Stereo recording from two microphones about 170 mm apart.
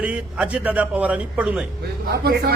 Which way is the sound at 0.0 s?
10° right (ahead or behind).